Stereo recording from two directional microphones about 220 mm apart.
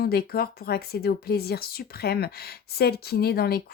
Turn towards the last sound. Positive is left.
turn(degrees=45)  # may be behind; listen again after turning